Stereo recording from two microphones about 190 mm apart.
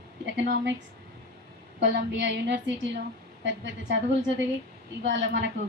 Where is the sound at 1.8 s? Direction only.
70° right (ahead or behind).